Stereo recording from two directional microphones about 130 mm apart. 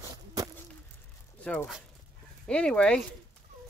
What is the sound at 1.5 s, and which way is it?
Speech, 10° left (ahead or behind).